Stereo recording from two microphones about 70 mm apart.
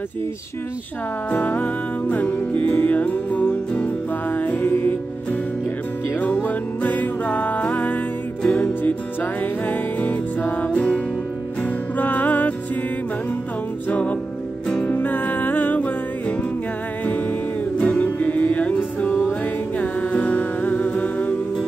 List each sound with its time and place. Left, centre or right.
1.3 s music: left
6.1 s music: left
13.8 s music: centre
17.7 s music: left